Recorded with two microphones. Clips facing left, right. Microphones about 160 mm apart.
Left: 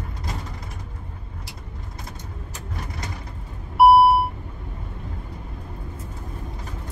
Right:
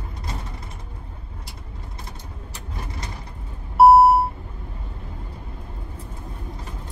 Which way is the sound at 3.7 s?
25° right (ahead or behind).